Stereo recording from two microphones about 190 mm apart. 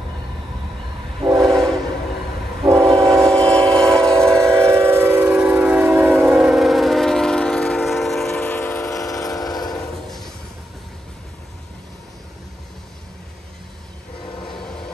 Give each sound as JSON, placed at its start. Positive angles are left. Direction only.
{"t": 1.4, "sound": "train", "side_deg": 0}
{"t": 2.6, "sound": "train", "side_deg": -15}
{"t": 3.1, "sound": "train", "side_deg": 5}
{"t": 4.4, "sound": "train", "side_deg": -15}